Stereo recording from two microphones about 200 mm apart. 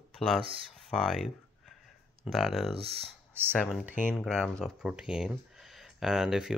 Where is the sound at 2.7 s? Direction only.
30° right (ahead or behind).